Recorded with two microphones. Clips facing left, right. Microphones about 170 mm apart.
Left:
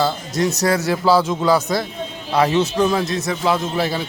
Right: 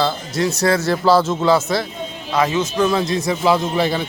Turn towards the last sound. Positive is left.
turn(degrees=5)  # may be behind; listen again after turning